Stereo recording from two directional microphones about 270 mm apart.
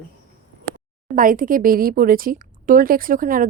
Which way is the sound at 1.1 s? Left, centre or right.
Right.